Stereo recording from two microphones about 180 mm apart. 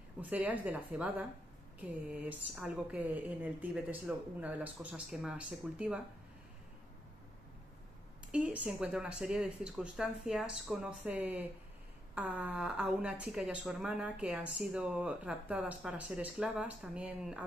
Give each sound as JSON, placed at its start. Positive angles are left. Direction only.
{"t": 0.2, "sound": "a woman's voice", "side_deg": -10}
{"t": 8.3, "sound": "speech", "side_deg": -5}